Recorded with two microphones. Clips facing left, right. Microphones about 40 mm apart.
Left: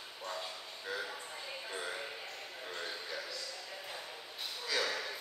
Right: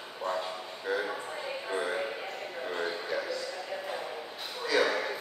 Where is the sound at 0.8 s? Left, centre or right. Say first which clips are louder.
Right 9 dB; right.